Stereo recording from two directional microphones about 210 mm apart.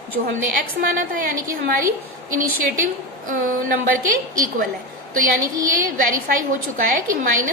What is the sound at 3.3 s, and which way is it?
Speech, 40° right (ahead or behind).